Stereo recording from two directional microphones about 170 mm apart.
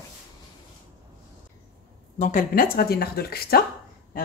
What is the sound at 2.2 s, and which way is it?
A woman's voice, 55° left (ahead or behind).